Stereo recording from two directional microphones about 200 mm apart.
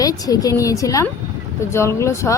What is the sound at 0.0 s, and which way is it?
Speech, 20° left (ahead or behind).